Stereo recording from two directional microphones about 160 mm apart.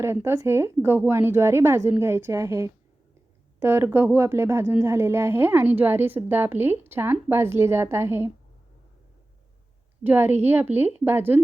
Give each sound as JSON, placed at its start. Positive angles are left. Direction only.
{"t": 0.0, "sound": "a woman's voice", "side_deg": -15}
{"t": 10.0, "sound": "a woman's voice", "side_deg": -15}